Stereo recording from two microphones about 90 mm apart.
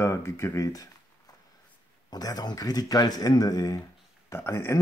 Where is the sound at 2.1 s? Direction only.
45° left (ahead or behind).